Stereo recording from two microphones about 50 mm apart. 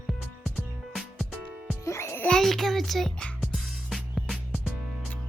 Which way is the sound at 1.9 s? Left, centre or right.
Left.